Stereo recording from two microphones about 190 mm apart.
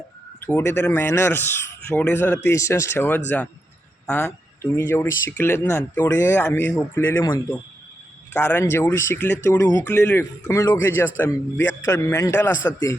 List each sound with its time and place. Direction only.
0.4 s speech: 10° left (ahead or behind)